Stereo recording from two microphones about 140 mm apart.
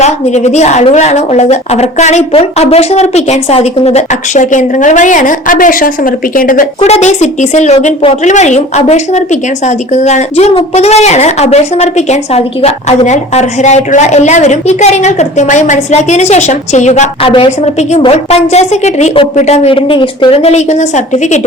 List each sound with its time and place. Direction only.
0.0 s a woman's voice: 55° left (ahead or behind); by 6.7 s 80° left
6.7 s a woman's voice: 50° left (ahead or behind)
17.2 s a woman's voice: 40° left (ahead or behind); by 21.4 s 55° left (ahead or behind)